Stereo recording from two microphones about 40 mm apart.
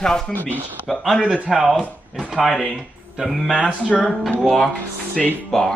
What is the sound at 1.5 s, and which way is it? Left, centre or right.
Speech, centre.